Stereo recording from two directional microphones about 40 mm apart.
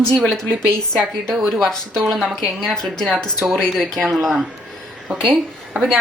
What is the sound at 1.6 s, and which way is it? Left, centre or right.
Speech, centre.